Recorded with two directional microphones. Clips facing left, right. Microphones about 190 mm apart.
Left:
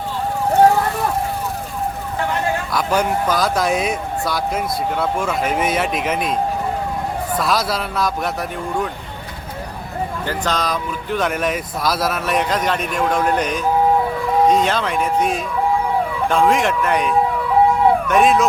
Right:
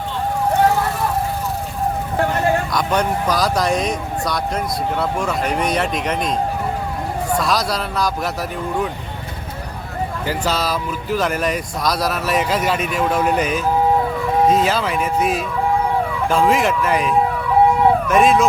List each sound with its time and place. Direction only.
2.7 s speech: 5° left (ahead or behind)
7.3 s speech: centre (ahead or behind)
10.2 s speech: 5° right (ahead or behind)